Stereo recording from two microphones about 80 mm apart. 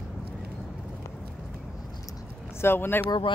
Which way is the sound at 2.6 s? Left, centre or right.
Left.